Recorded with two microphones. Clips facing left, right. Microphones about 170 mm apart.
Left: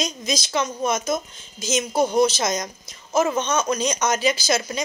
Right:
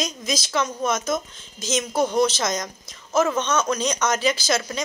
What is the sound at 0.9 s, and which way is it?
Speech, 15° left (ahead or behind).